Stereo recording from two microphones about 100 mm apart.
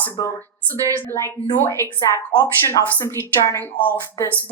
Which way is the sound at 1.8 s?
30° left (ahead or behind).